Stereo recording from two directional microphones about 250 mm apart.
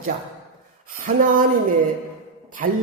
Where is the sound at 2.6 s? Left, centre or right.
Right.